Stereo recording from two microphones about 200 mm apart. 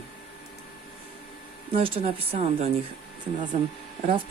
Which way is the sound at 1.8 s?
30° right (ahead or behind).